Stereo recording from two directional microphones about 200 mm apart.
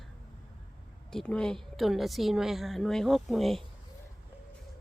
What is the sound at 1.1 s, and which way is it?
A woman's voice, 5° left (ahead or behind).